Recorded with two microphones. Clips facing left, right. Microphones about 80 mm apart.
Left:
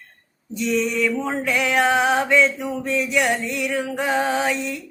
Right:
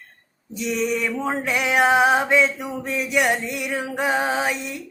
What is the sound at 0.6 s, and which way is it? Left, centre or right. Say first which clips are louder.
Mantra: left 2 dB; centre.